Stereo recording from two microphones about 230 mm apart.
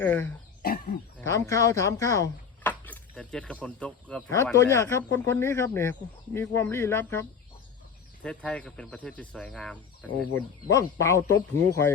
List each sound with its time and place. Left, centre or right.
0.0 s speech: centre
0.6 s a sound: left
1.2 s speech: centre